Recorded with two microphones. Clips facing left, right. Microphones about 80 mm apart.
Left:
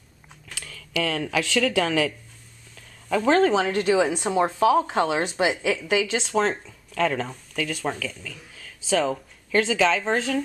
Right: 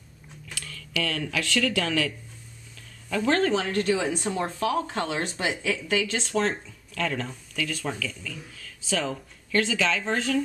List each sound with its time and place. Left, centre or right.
0.9 s speech: left
7.0 s speech: left